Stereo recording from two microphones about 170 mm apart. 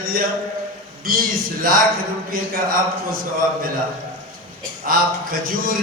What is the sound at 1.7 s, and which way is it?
Mantra, 55° right (ahead or behind).